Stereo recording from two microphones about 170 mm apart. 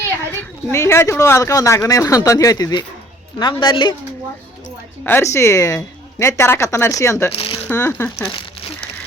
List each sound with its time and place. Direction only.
0.3 s speech: 15° left (ahead or behind)
5.0 s a woman's voice: 15° left (ahead or behind)
7.3 s speech: 30° left (ahead or behind)
7.7 s a woman's voice: 15° left (ahead or behind)